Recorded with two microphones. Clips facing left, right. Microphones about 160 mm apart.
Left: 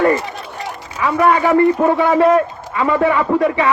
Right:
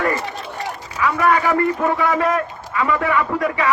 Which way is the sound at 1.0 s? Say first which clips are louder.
Left 3 dB; 25° left (ahead or behind).